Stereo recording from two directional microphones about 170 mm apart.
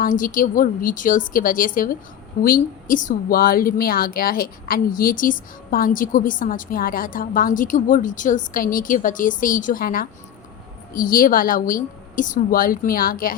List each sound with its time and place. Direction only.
0.0 s a woman's voice: 55° left (ahead or behind)